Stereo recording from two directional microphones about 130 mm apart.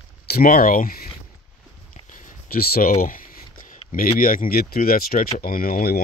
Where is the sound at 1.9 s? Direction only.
90° left.